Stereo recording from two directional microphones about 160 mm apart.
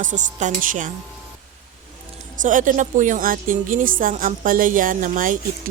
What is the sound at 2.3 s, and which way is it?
A woman's voice, 55° right (ahead or behind).